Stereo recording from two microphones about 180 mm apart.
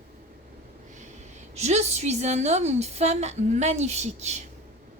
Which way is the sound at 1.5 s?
40° right (ahead or behind).